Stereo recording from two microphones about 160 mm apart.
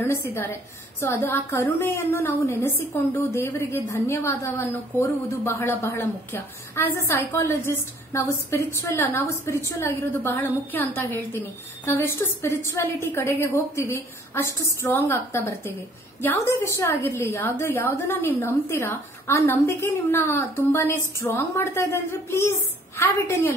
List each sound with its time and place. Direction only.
0.0 s a woman's voice: 15° left (ahead or behind)